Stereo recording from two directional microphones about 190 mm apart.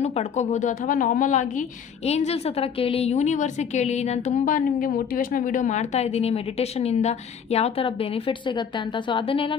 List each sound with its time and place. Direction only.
0.0 s a woman's voice: 35° left (ahead or behind)